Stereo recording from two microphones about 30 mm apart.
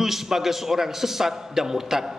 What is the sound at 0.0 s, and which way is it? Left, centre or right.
A man's voice, centre.